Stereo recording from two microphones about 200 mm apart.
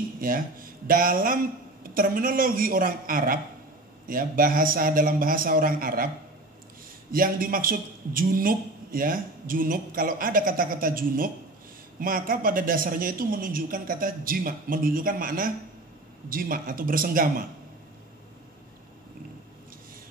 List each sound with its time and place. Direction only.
0.2 s a man's voice: 45° right (ahead or behind)
7.1 s a man's voice: 45° right (ahead or behind)